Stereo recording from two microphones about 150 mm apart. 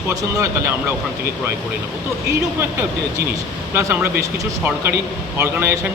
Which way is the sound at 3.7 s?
15° right (ahead or behind).